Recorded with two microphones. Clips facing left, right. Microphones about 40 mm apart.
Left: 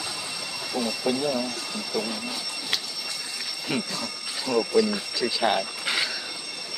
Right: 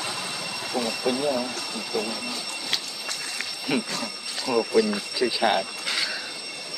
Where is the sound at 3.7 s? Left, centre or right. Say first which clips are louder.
Right 2 dB; centre.